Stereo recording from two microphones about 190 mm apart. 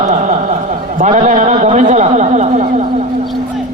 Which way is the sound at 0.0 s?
35° right (ahead or behind).